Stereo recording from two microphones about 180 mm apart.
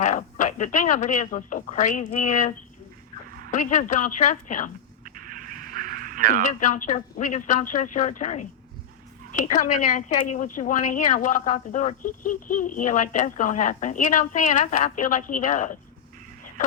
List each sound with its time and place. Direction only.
0.0 s a woman's voice: 45° left (ahead or behind)
3.5 s a woman's voice: 45° left (ahead or behind)
5.0 s a sound: 50° right (ahead or behind)
6.4 s a woman's voice: 45° left (ahead or behind)